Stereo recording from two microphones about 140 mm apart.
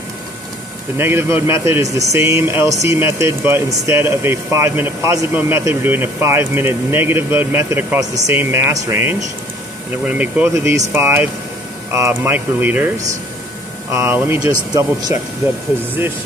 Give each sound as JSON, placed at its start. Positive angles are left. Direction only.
{"t": 0.9, "sound": "speech", "side_deg": -15}
{"t": 13.9, "sound": "speech", "side_deg": -15}
{"t": 14.7, "sound": "speech", "side_deg": -25}